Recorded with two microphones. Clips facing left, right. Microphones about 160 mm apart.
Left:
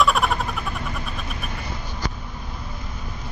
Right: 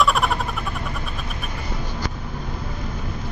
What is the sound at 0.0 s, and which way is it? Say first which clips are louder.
Vehicle: even; centre (ahead or behind).